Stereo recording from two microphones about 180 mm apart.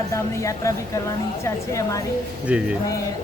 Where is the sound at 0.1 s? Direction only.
15° left (ahead or behind).